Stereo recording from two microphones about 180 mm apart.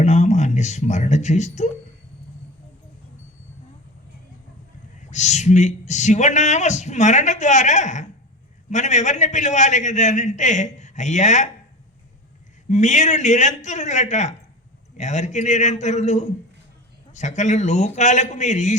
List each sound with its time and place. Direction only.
0.0 s speech: 40° left (ahead or behind)
4.9 s speech: 40° left (ahead or behind)
12.6 s speech: 40° left (ahead or behind)